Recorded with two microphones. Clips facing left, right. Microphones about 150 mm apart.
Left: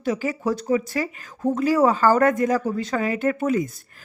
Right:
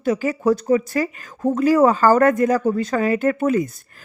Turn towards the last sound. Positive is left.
turn(degrees=-55)  # may be behind; listen again after turning